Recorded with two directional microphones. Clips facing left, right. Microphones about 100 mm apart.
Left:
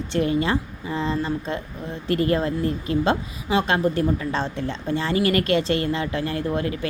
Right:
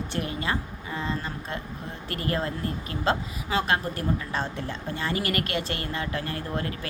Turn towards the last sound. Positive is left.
turn(degrees=20)  # may be behind; listen again after turning